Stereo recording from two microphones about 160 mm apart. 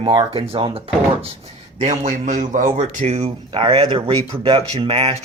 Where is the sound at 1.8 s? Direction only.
50° right (ahead or behind).